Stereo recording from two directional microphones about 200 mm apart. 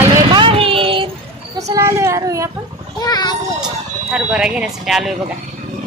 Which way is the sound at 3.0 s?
20° left (ahead or behind).